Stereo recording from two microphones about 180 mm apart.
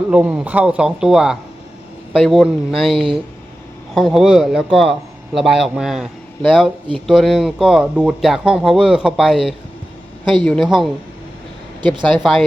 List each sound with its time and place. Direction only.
0.1 s speech: 5° right (ahead or behind)
2.9 s speech: 30° right (ahead or behind)
3.9 s speech: centre (ahead or behind)
11.8 s speech: 25° right (ahead or behind)
12.2 s speech: centre (ahead or behind)